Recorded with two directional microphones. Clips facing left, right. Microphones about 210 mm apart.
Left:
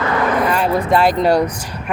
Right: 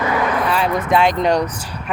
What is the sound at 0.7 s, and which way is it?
Speech, 30° left (ahead or behind).